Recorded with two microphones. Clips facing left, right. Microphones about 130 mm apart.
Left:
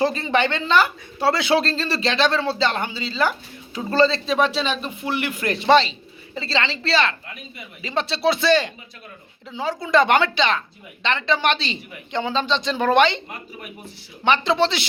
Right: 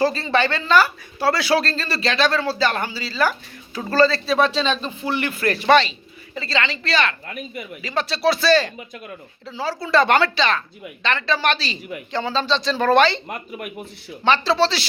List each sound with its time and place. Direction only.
0.0 s a man's voice: 20° left (ahead or behind)
7.3 s speech: 55° right (ahead or behind)
7.8 s speech: 25° left (ahead or behind)
13.2 s speech: 50° right (ahead or behind)
14.3 s speech: 20° left (ahead or behind)